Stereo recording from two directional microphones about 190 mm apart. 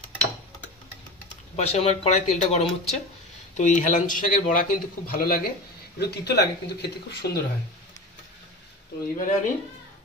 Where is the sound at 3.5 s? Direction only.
40° left (ahead or behind); by 7.4 s 60° left (ahead or behind).